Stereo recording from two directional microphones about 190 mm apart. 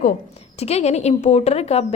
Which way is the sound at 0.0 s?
40° left (ahead or behind).